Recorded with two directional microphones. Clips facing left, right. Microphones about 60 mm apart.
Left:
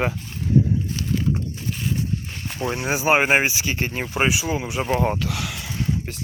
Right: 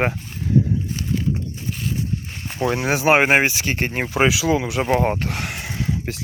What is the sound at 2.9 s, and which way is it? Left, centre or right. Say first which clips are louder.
Speech: right 2 dB; right.